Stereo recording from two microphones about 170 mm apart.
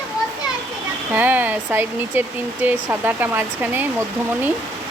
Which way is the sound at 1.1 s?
10° right (ahead or behind).